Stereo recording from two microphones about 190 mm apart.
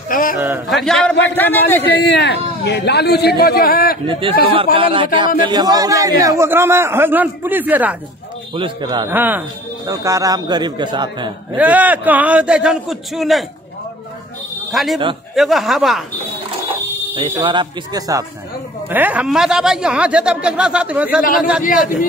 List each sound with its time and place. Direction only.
0.1 s a man's voice: 45° left (ahead or behind)
0.7 s a man's voice: centre (ahead or behind)
2.0 s a man's voice: 65° left (ahead or behind)
4.1 s a man's voice: 25° right (ahead or behind); by 8.0 s 10° right (ahead or behind)
8.5 s a man's voice: 25° right (ahead or behind)
9.1 s a man's voice: 10° right (ahead or behind)
11.5 s a man's voice: 10° right (ahead or behind)
14.7 s a man's voice: centre (ahead or behind)
17.1 s a man's voice: 25° right (ahead or behind); by 21.6 s 5° right (ahead or behind)